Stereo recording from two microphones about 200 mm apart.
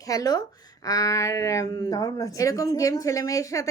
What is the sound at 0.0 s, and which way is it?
Speech, 15° left (ahead or behind).